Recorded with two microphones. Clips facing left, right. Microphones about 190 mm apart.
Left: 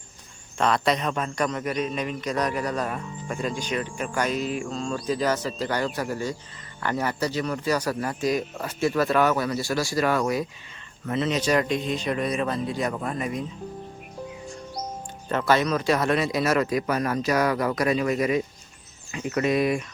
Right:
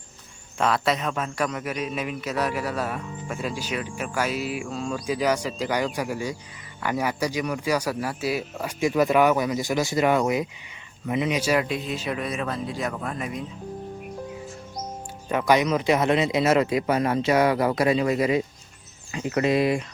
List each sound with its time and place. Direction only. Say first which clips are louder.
0.6 s speech: even; 5° right (ahead or behind)
15.3 s speech: right 1 dB; 15° right (ahead or behind)